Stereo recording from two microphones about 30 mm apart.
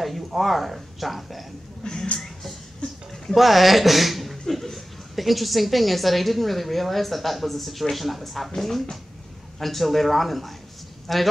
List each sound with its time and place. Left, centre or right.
0.0 s speech: centre
1.8 s speech: left
3.3 s a woman's voice: centre